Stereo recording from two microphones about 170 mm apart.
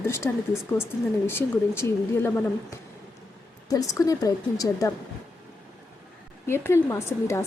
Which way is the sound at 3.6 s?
20° left (ahead or behind).